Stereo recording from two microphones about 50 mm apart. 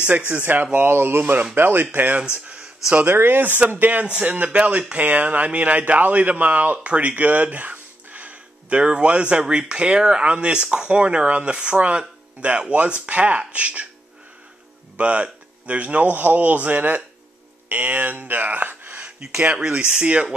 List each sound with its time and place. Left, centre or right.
0.3 s a man's voice: right
0.7 s speech: right
1.2 s a man's voice: right
2.3 s a sound: right
3.1 s a man's voice: right
4.1 s speech: right
15.0 s a man's voice: right